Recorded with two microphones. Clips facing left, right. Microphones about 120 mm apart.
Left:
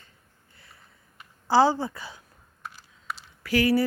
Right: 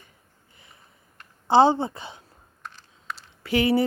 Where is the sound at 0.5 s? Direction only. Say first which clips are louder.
Right 1 dB; 20° right (ahead or behind).